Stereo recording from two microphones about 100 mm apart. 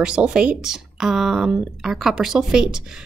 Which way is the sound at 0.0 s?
10° right (ahead or behind).